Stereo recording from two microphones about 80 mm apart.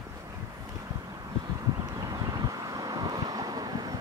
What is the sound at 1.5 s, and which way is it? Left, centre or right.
Vehicle, right.